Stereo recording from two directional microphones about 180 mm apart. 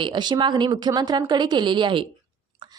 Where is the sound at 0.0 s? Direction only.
25° right (ahead or behind).